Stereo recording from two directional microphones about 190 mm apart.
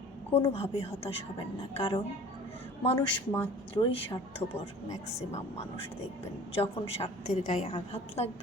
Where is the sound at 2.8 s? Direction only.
30° left (ahead or behind).